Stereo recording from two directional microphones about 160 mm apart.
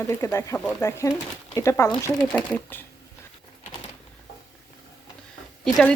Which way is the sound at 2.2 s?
5° right (ahead or behind).